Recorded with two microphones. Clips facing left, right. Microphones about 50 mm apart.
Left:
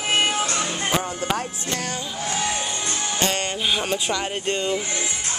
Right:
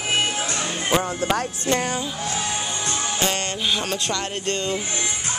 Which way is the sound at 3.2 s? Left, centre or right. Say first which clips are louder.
Left 2 dB; centre.